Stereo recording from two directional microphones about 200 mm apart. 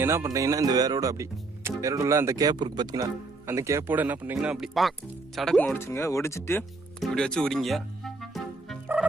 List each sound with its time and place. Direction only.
0.0 s speech: 15° right (ahead or behind); by 6.6 s 15° left (ahead or behind)
7.0 s music: 5° left (ahead or behind)